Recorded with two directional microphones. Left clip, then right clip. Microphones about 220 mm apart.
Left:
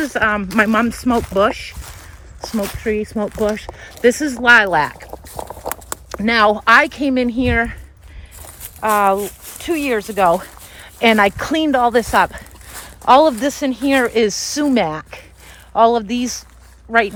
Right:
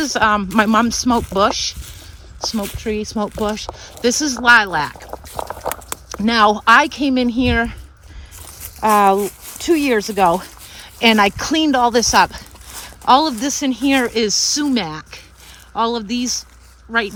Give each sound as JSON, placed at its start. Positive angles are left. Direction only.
{"t": 0.0, "sound": "speech", "side_deg": -15}
{"t": 5.4, "sound": "a sound", "side_deg": 15}
{"t": 6.1, "sound": "speech", "side_deg": -10}
{"t": 9.5, "sound": "speech", "side_deg": -15}